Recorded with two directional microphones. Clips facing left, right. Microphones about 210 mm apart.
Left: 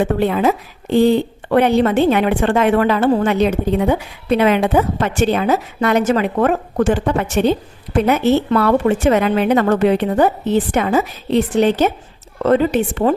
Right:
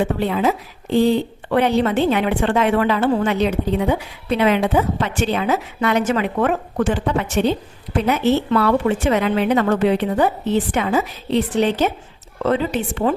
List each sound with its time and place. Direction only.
0.0 s a woman's voice: 55° left (ahead or behind)